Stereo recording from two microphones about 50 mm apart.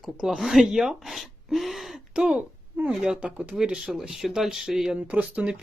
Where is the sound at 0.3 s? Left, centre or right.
Centre.